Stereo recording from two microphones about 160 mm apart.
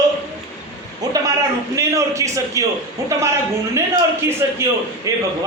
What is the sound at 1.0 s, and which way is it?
A man's voice, 25° right (ahead or behind).